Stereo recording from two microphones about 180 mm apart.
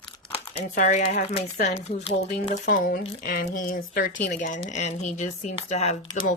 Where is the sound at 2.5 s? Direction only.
50° left (ahead or behind).